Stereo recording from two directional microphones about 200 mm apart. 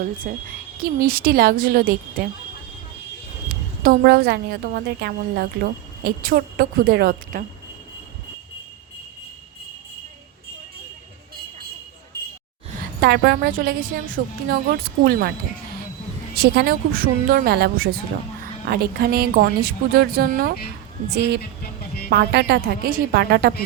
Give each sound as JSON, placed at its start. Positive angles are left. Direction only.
{"t": 0.3, "sound": "a woman's voice", "side_deg": -45}
{"t": 3.8, "sound": "a woman's voice", "side_deg": -50}
{"t": 13.0, "sound": "a woman's voice", "side_deg": -55}
{"t": 16.3, "sound": "a woman's voice", "side_deg": -55}
{"t": 21.1, "sound": "a woman's voice", "side_deg": -60}
{"t": 21.6, "sound": "music", "side_deg": 50}
{"t": 22.1, "sound": "a woman's voice", "side_deg": -55}